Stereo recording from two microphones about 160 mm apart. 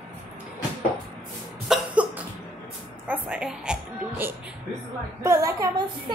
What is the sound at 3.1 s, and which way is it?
A woman's voice, 5° right (ahead or behind).